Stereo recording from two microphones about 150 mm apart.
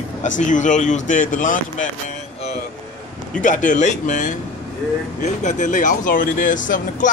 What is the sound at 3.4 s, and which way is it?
Speech, 55° left (ahead or behind).